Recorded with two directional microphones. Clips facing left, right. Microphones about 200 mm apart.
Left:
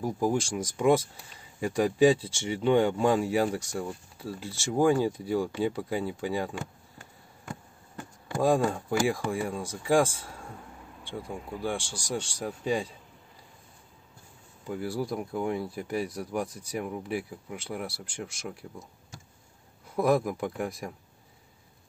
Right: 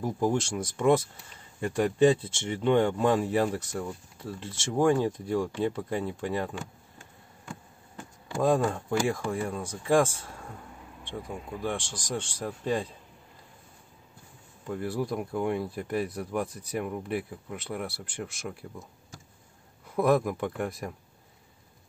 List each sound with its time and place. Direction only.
0.0 s speech: 10° left (ahead or behind)
8.4 s speech: 10° left (ahead or behind)
14.7 s speech: 5° left (ahead or behind)
20.0 s speech: centre (ahead or behind)